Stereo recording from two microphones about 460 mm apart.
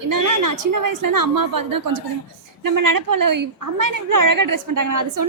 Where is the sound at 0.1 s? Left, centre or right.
Right.